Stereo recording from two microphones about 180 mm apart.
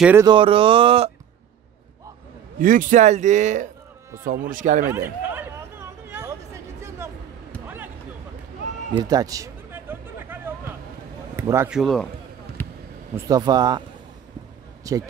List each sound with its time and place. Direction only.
0.2 s speech: 25° right (ahead or behind)
2.6 s speech: 50° right (ahead or behind)
4.9 s chatter: 10° right (ahead or behind)
7.6 s a sound: 10° right (ahead or behind)
8.9 s a sound: 20° right (ahead or behind)
11.3 s speech: 15° right (ahead or behind)
11.8 s a man's voice: 5° left (ahead or behind)
13.1 s speech: 20° right (ahead or behind)